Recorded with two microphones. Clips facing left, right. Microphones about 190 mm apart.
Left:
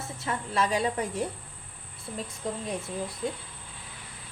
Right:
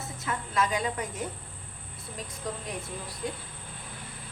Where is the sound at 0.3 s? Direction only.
30° left (ahead or behind).